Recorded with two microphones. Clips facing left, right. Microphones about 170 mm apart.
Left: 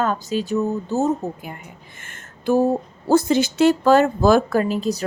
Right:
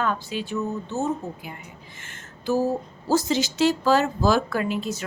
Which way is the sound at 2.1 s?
55° left (ahead or behind).